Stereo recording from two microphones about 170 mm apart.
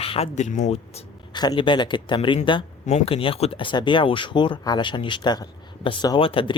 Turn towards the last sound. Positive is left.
turn(degrees=30)  # may be behind; listen again after turning